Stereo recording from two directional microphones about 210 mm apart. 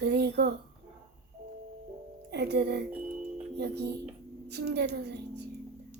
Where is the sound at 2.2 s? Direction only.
50° right (ahead or behind).